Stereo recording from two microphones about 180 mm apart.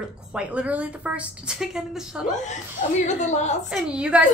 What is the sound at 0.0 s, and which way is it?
Speech, 5° right (ahead or behind).